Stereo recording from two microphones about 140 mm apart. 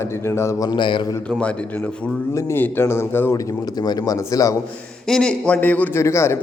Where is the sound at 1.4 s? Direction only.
10° left (ahead or behind).